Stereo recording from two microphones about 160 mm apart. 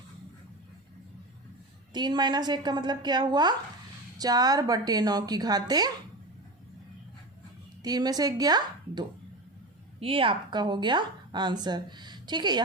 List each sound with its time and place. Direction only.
1.9 s a woman's voice: 25° right (ahead or behind)
7.8 s a woman's voice: 25° right (ahead or behind)